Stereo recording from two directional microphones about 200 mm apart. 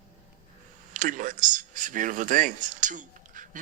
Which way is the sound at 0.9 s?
40° right (ahead or behind).